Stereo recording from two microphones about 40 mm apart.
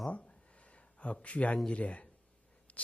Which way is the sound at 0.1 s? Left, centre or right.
Left.